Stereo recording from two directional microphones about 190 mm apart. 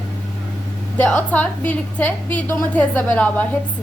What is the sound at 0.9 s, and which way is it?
A woman's voice, 5° left (ahead or behind).